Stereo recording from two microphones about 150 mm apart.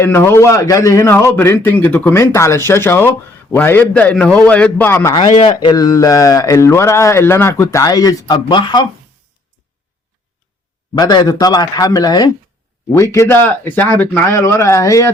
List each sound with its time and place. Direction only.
0.0 s a man's voice: 15° left (ahead or behind)
5.5 s speech: 30° left (ahead or behind)
10.9 s a man's voice: 25° left (ahead or behind)